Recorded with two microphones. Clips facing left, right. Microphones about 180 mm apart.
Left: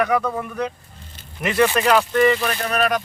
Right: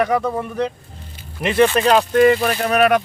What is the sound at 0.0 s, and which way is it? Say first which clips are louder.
Speech: right 2 dB; 25° right (ahead or behind).